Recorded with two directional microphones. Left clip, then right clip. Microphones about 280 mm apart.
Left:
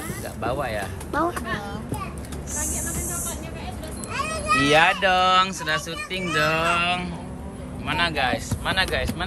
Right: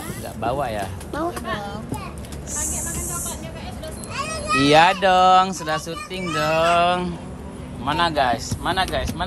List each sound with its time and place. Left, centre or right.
0.4 s speech: centre
2.5 s vehicle: centre
4.1 s children playing: centre
4.6 s speech: centre